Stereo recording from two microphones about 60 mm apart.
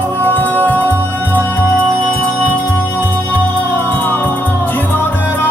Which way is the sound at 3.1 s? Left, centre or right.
Left.